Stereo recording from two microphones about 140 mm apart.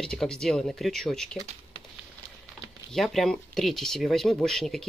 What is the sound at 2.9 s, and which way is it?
Speech, centre (ahead or behind).